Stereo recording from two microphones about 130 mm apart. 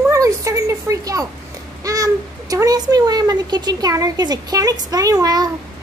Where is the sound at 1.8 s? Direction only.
25° right (ahead or behind).